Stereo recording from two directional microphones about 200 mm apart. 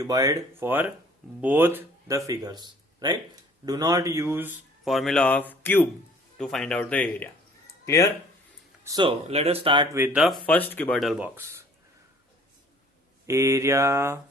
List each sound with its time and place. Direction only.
0.0 s speech: 15° right (ahead or behind); by 7.3 s 5° left (ahead or behind)
8.8 s speech: 20° right (ahead or behind)
10.0 s speech: 5° right (ahead or behind)
13.2 s speech: 15° right (ahead or behind)